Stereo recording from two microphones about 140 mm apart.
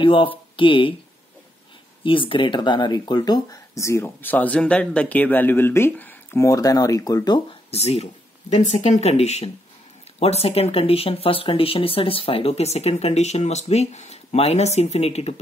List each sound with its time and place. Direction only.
0.0 s speech: 40° left (ahead or behind)
2.0 s speech: 40° left (ahead or behind)
7.7 s speech: 50° left (ahead or behind)